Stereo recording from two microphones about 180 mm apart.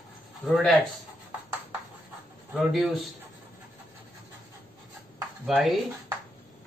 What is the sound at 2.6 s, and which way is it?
Speech, centre (ahead or behind).